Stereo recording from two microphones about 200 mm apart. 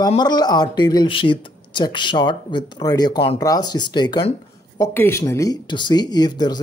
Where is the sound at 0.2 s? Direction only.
20° left (ahead or behind).